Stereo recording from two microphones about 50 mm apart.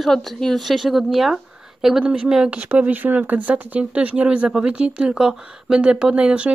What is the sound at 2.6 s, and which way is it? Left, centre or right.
Speech, right.